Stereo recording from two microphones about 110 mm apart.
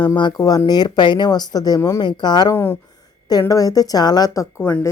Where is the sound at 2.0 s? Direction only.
45° left (ahead or behind).